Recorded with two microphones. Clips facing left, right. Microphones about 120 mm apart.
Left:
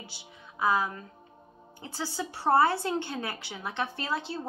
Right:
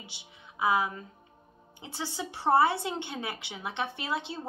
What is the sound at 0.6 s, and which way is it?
A woman's voice, 20° right (ahead or behind).